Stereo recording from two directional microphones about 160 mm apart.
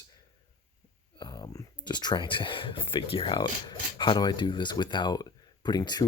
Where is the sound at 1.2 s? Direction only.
30° left (ahead or behind).